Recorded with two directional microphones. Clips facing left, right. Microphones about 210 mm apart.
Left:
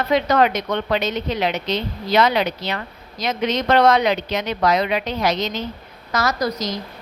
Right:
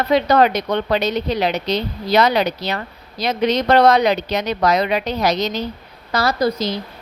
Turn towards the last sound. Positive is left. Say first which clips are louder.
# right 4 dB
turn(degrees=-30)  # may be behind; listen again after turning